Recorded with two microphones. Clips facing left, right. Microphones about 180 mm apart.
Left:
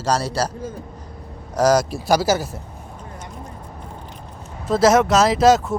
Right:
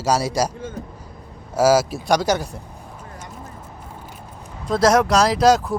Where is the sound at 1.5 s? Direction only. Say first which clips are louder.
Right 1 dB; 5° right (ahead or behind).